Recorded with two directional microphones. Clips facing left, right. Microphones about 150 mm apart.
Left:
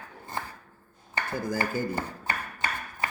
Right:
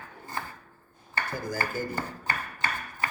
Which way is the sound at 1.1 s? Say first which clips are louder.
Left 2 dB; 20° left (ahead or behind).